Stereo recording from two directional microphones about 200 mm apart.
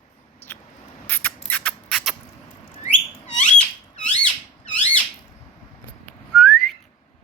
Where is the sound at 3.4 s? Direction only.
35° left (ahead or behind).